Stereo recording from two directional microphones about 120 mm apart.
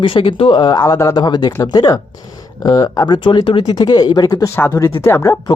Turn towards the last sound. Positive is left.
turn(degrees=20)  # may be behind; listen again after turning